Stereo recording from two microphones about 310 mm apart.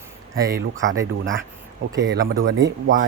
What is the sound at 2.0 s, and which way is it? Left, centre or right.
Speech, right.